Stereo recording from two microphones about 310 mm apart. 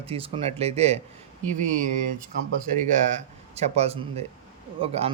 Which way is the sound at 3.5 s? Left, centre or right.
Centre.